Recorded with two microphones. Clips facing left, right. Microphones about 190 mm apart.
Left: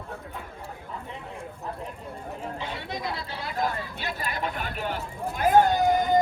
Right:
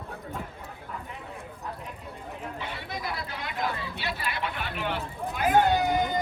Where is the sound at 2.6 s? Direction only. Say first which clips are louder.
Left 2 dB; 25° left (ahead or behind); by 4.9 s 40° left (ahead or behind).